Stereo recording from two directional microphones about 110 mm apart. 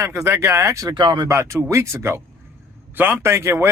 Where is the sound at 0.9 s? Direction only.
45° right (ahead or behind).